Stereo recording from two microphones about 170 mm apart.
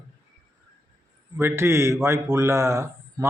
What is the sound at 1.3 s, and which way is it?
A man's voice, 15° right (ahead or behind).